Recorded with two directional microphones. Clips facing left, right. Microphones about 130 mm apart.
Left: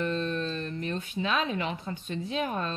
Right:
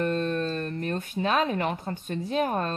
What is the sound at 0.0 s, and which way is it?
Speech, 50° right (ahead or behind).